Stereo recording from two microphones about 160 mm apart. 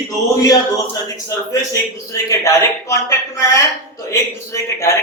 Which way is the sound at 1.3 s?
20° left (ahead or behind).